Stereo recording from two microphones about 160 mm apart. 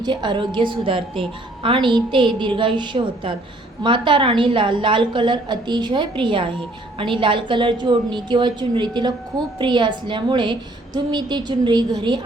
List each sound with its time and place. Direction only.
0.0 s a woman's voice: 30° right (ahead or behind)